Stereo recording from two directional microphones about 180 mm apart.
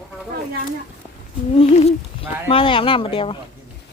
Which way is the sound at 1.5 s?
35° left (ahead or behind).